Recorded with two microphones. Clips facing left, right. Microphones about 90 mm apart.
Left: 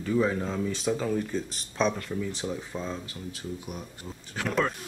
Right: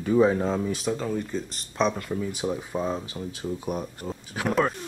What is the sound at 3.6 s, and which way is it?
Speech, 45° right (ahead or behind).